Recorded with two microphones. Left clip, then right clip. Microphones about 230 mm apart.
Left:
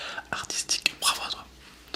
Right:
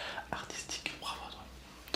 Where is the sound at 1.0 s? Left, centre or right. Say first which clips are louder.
Left 14 dB; left.